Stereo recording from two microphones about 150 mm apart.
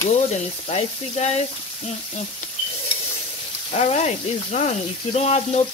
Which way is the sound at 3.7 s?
50° left (ahead or behind).